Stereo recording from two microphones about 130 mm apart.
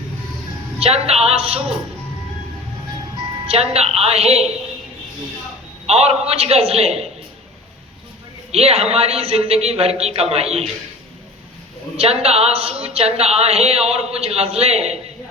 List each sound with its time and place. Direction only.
0.8 s a woman's voice: 50° right (ahead or behind)
3.4 s a woman's voice: 50° right (ahead or behind)
5.8 s a woman's voice: 50° right (ahead or behind)
8.5 s a woman's voice: 55° right (ahead or behind)
11.9 s a woman's voice: 50° right (ahead or behind)